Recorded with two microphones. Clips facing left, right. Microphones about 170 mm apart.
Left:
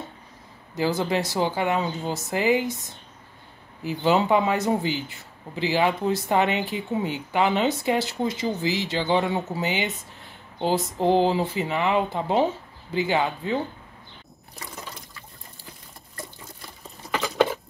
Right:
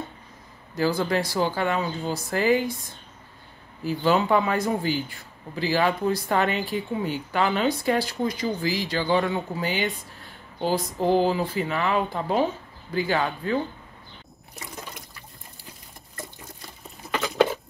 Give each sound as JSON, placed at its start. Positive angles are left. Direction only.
{"t": 0.7, "sound": "speech", "side_deg": 20}